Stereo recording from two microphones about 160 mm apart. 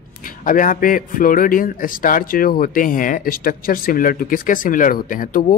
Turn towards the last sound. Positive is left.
turn(degrees=55)  # may be behind; listen again after turning